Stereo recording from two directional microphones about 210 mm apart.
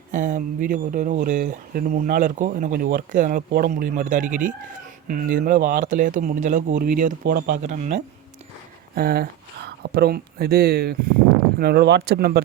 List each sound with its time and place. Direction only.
0.1 s speech: 35° right (ahead or behind)
9.0 s speech: 45° right (ahead or behind)